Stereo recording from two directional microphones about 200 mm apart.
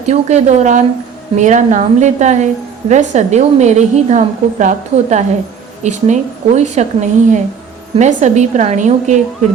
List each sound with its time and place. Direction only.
0.0 s a woman's voice: 35° right (ahead or behind)